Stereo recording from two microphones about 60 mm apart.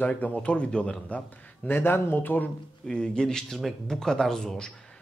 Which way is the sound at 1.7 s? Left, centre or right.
Left.